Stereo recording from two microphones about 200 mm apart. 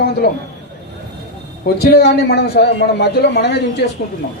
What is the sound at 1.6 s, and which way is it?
A man's voice, 50° left (ahead or behind).